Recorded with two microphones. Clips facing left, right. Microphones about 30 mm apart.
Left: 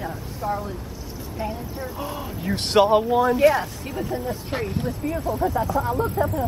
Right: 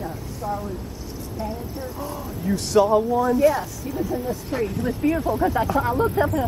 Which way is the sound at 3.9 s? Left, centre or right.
Left.